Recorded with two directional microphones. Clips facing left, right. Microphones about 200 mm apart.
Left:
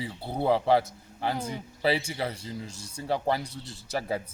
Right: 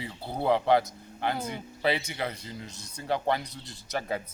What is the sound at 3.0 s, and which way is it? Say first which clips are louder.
Speech: even; 5° left (ahead or behind).